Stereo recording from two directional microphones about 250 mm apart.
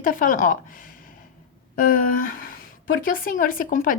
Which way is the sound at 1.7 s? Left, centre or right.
Left.